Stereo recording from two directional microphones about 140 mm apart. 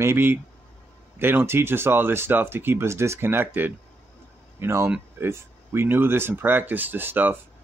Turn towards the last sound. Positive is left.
turn(degrees=-15)  # may be behind; listen again after turning